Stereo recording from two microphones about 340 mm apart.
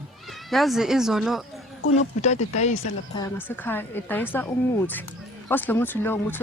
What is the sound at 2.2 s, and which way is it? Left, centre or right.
Speech, centre.